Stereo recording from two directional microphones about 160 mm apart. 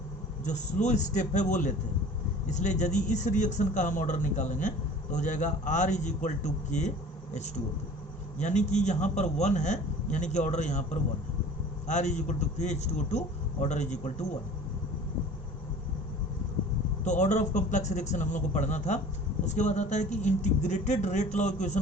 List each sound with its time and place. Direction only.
0.4 s a man's voice: 45° left (ahead or behind)
8.4 s a man's voice: 45° left (ahead or behind)
11.9 s a man's voice: 45° left (ahead or behind)
17.0 s a man's voice: 45° left (ahead or behind)